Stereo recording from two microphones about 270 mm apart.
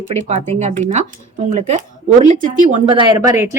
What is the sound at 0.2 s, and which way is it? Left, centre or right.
Speech, right.